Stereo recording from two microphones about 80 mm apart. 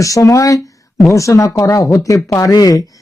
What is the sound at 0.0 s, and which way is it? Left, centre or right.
Speech, left.